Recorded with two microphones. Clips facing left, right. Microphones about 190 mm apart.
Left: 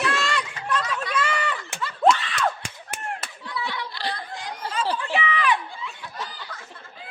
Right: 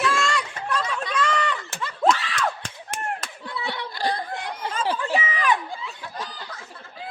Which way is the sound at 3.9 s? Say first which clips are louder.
Right 5 dB; 45° right (ahead or behind).